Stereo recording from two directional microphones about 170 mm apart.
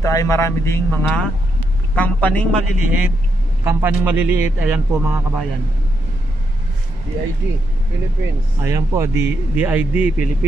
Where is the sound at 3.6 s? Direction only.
15° right (ahead or behind).